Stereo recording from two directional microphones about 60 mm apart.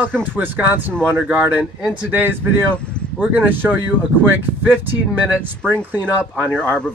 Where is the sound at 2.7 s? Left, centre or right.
Centre.